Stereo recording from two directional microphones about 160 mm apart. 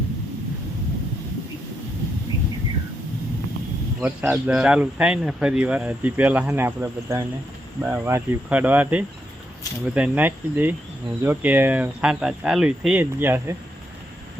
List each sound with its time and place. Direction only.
4.0 s speech: 10° right (ahead or behind)